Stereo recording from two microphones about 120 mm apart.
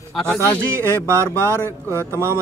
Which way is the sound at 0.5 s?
20° right (ahead or behind).